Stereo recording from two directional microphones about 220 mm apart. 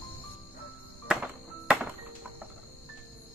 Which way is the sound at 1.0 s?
5° right (ahead or behind).